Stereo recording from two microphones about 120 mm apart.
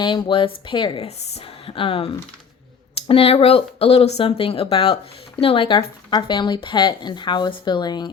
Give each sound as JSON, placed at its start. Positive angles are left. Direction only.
{"t": 0.0, "sound": "speech", "side_deg": 40}
{"t": 1.0, "sound": "speech", "side_deg": 60}